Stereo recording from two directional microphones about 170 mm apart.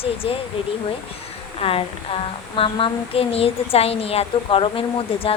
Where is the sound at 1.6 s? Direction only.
35° left (ahead or behind).